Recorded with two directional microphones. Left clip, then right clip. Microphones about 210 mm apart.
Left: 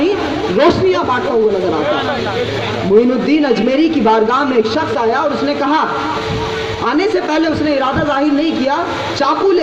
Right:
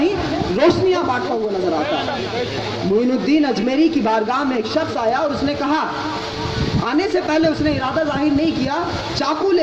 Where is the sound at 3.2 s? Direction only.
40° right (ahead or behind).